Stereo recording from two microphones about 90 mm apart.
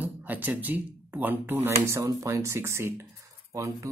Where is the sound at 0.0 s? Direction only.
20° right (ahead or behind).